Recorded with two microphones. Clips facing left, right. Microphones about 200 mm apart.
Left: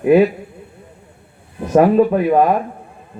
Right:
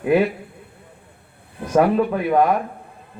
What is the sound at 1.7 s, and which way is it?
Speech, 25° left (ahead or behind).